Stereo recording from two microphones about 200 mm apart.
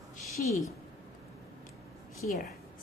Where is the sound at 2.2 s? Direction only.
40° left (ahead or behind).